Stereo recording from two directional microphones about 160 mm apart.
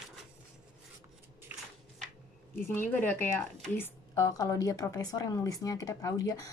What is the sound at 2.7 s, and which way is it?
A woman's voice, 10° left (ahead or behind).